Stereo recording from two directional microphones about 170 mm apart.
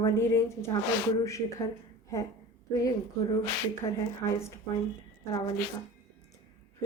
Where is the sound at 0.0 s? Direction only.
15° left (ahead or behind).